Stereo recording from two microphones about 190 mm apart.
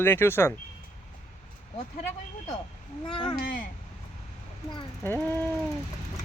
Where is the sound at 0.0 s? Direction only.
10° left (ahead or behind).